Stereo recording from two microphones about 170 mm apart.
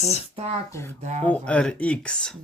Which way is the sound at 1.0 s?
45° right (ahead or behind).